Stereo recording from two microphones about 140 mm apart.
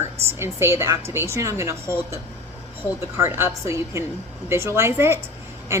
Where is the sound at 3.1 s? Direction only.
20° right (ahead or behind).